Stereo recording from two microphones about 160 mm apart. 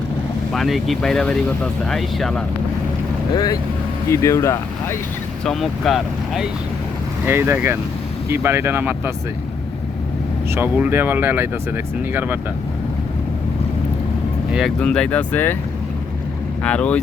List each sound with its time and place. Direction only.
0.5 s speech: centre (ahead or behind)
3.3 s speech: 25° left (ahead or behind)
5.5 s speech: centre (ahead or behind)
7.3 s speech: 15° right (ahead or behind)
10.5 s speech: 10° right (ahead or behind)
14.8 s speech: 5° left (ahead or behind)
16.6 s speech: 5° left (ahead or behind)